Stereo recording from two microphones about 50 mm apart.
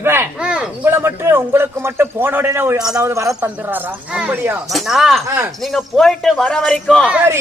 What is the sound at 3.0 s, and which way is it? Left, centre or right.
Speech, right.